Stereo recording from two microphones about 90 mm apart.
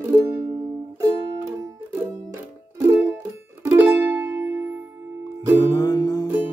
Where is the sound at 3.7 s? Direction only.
20° right (ahead or behind).